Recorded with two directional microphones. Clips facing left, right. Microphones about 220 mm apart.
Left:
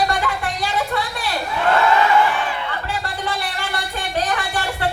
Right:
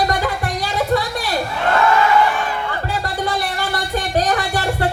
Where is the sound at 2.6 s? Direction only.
40° right (ahead or behind).